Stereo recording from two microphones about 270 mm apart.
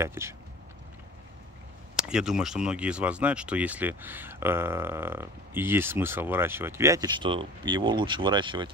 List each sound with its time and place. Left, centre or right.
0.0 s speech: centre
2.0 s speech: centre